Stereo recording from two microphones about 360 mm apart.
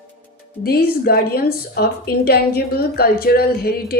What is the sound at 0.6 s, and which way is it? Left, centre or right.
Speech, left.